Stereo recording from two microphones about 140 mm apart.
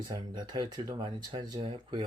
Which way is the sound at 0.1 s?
30° right (ahead or behind).